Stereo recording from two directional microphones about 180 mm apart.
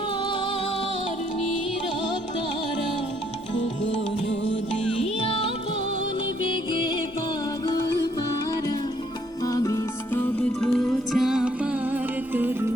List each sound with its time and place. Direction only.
5.2 s music: 30° left (ahead or behind)
9.4 s music: 20° left (ahead or behind); by 12.6 s 10° right (ahead or behind)